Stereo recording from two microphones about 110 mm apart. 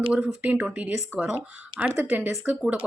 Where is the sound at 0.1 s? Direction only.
15° right (ahead or behind).